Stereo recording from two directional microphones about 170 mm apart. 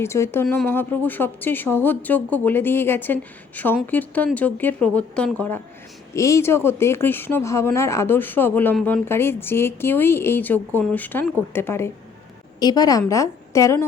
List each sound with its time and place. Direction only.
0.0 s speech: 15° left (ahead or behind)
6.1 s a woman's voice: 20° left (ahead or behind)